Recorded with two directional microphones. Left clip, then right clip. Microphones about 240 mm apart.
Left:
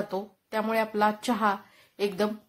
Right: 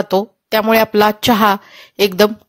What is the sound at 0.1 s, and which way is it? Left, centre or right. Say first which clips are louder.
Speech: right 16 dB; right.